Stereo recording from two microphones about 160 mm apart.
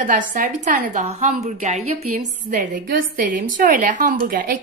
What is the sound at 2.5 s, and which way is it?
A woman's voice, 55° right (ahead or behind).